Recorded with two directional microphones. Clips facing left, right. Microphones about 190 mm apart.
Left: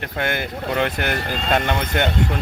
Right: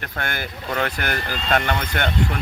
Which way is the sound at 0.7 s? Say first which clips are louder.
Left 2 dB; 15° left (ahead or behind).